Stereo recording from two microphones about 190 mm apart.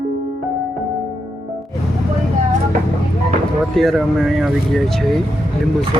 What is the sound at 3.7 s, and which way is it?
Speech, centre (ahead or behind).